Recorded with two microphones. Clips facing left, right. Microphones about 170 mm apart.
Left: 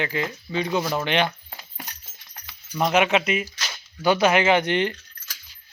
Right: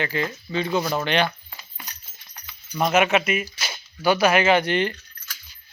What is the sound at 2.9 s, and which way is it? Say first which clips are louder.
Speech: right 1 dB; 15° left (ahead or behind).